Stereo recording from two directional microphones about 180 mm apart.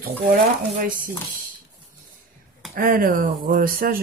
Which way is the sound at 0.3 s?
50° right (ahead or behind).